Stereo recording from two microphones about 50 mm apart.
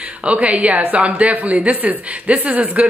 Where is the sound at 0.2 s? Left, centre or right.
Right.